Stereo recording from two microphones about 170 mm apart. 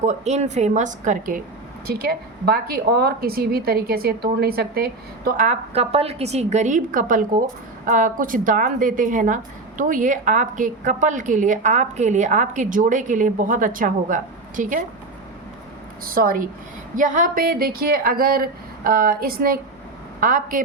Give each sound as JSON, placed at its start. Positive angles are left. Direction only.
{"t": 0.0, "sound": "a woman's voice", "side_deg": -45}
{"t": 1.9, "sound": "a woman's voice", "side_deg": -60}
{"t": 16.0, "sound": "a woman's voice", "side_deg": -55}